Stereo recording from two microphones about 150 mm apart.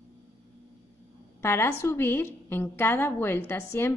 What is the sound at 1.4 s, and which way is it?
A woman's voice, 15° left (ahead or behind).